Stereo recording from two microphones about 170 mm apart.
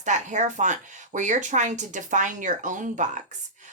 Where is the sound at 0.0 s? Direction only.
45° right (ahead or behind).